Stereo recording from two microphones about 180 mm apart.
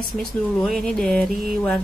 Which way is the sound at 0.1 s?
Centre (ahead or behind).